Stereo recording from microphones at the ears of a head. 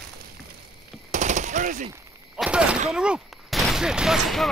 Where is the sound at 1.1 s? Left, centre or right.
Right.